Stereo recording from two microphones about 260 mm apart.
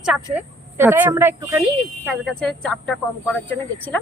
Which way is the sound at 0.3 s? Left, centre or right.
Centre.